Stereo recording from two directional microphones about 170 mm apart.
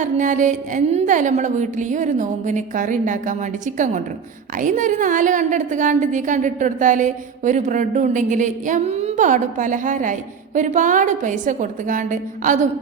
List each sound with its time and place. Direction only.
0.0 s a woman's voice: 50° right (ahead or behind)